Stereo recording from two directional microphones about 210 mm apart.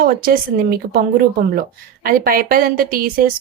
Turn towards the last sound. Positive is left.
turn(degrees=-40)  # may be behind; listen again after turning